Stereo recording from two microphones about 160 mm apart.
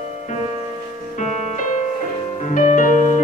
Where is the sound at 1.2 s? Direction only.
55° left (ahead or behind).